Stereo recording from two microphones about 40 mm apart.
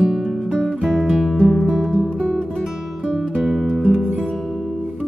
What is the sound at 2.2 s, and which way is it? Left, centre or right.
Music, left.